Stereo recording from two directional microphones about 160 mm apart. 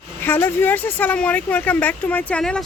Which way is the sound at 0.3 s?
15° left (ahead or behind).